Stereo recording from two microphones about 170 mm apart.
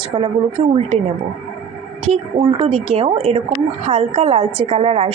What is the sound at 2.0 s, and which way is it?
A woman's voice, 35° right (ahead or behind).